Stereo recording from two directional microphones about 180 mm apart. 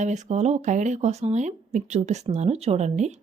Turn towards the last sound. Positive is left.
turn(degrees=-40)  # may be behind; listen again after turning